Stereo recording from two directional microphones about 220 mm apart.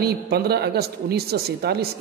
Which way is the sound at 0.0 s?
45° right (ahead or behind).